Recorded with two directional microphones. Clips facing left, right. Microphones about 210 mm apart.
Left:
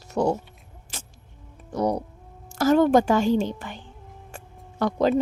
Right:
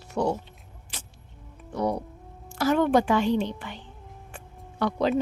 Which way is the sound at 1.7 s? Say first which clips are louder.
Left 3 dB; 40° left (ahead or behind).